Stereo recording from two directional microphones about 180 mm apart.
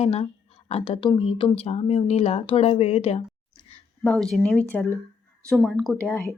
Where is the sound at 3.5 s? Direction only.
25° left (ahead or behind).